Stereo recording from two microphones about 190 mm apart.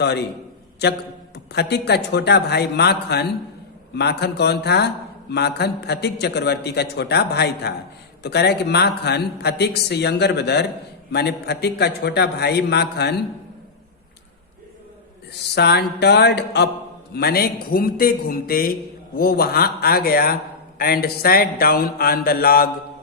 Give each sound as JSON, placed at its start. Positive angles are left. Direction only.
{"t": 0.0, "sound": "a man's voice", "side_deg": 60}
{"t": 1.5, "sound": "a man's voice", "side_deg": 60}
{"t": 15.3, "sound": "a man's voice", "side_deg": 60}